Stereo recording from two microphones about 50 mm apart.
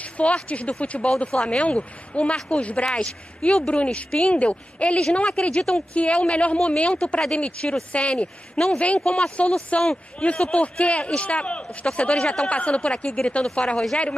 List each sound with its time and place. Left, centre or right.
0.0 s speech: left